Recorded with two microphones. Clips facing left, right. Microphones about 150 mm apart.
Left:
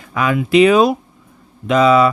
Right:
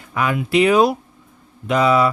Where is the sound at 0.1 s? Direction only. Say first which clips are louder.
Left 4 dB; 90° left.